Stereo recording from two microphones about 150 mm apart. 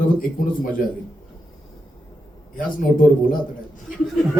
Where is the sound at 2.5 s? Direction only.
70° left (ahead or behind).